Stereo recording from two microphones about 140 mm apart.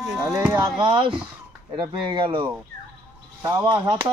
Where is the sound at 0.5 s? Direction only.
30° right (ahead or behind).